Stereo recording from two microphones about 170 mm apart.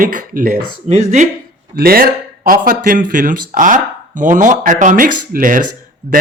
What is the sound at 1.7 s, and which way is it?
Speech, 60° right (ahead or behind).